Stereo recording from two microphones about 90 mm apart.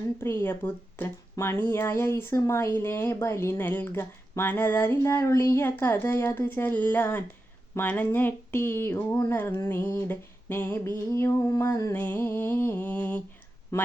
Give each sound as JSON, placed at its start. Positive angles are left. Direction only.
{"t": 0.2, "sound": "speech", "side_deg": 25}
{"t": 13.7, "sound": "speech", "side_deg": 30}